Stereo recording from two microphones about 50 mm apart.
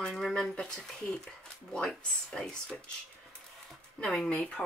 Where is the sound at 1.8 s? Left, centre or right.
Centre.